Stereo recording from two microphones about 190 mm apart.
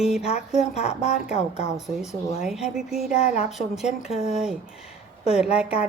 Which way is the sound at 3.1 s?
35° left (ahead or behind).